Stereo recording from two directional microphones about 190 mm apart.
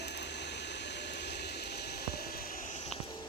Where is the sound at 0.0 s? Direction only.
60° left (ahead or behind); by 2.9 s 40° left (ahead or behind).